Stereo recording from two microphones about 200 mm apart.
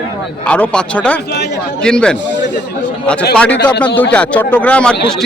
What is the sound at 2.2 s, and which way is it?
Speech, 60° left (ahead or behind).